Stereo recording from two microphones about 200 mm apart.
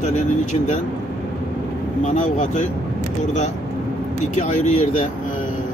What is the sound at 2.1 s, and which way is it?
Speech, 40° left (ahead or behind).